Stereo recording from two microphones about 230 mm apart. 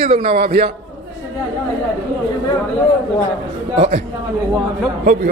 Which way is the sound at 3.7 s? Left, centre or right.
Right.